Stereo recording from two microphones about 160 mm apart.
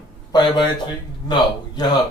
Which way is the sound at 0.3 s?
25° left (ahead or behind).